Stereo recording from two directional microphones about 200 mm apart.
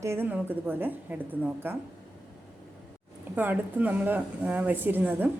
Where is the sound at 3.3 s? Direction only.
10° right (ahead or behind).